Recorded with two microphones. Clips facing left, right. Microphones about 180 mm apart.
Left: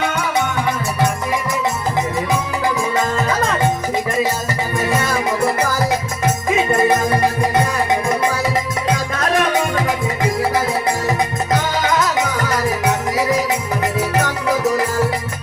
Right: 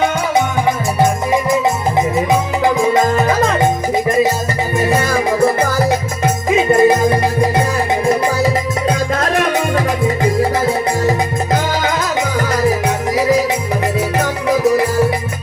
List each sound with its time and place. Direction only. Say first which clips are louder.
2.9 s music: right 5 dB; 25° right (ahead or behind)
4.8 s music: right 4 dB; 30° right (ahead or behind)
8.9 s music: right 2 dB; 35° right (ahead or behind)
11.5 s music: even; 30° right (ahead or behind)
14.5 s music: right 5 dB; 20° right (ahead or behind)